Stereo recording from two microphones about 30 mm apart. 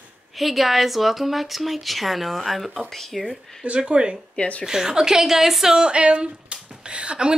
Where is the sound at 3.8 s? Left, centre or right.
Right.